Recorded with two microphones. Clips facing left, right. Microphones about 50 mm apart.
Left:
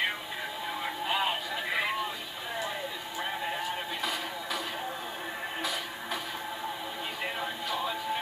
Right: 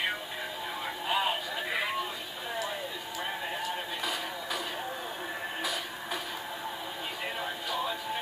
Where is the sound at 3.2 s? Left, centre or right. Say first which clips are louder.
Left 2 dB; centre.